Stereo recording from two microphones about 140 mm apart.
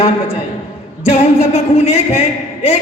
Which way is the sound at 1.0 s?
50° left (ahead or behind).